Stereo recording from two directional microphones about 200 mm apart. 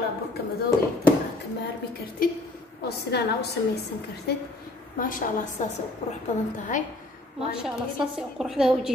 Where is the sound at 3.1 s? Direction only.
55° left (ahead or behind).